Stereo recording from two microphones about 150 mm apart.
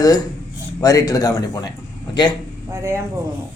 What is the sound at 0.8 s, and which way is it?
Speech, 25° left (ahead or behind).